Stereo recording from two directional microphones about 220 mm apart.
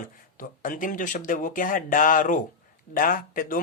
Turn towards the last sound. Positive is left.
turn(degrees=40)  # may be behind; listen again after turning